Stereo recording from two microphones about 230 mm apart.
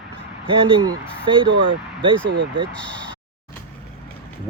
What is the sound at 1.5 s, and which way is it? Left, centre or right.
Speech, right.